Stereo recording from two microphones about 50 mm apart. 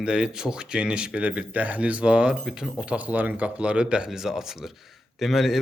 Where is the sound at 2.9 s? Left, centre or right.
Right.